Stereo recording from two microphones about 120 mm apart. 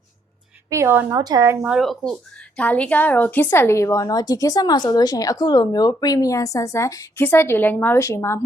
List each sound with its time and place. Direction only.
0.7 s a woman's voice: 20° right (ahead or behind)
1.2 s speech: 30° right (ahead or behind)
1.8 s a woman's voice: centre (ahead or behind); by 8.4 s 20° left (ahead or behind)